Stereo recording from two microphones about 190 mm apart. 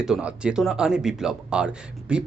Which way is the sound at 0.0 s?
5° right (ahead or behind).